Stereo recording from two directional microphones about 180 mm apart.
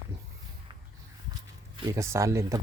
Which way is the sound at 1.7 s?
15° right (ahead or behind).